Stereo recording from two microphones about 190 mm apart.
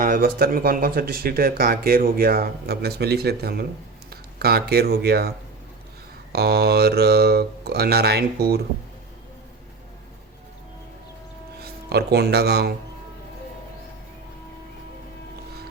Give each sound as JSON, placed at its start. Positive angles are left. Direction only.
{"t": 0.0, "sound": "speech", "side_deg": -45}
{"t": 6.3, "sound": "speech", "side_deg": -55}
{"t": 11.6, "sound": "speech", "side_deg": -60}